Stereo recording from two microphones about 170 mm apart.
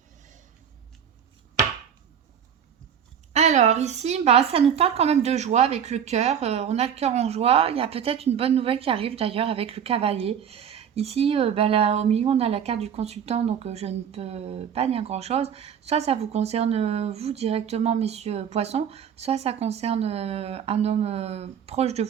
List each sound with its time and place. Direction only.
3.3 s a woman's voice: 45° right (ahead or behind)